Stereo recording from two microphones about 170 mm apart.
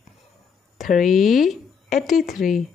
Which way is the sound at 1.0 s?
Centre (ahead or behind).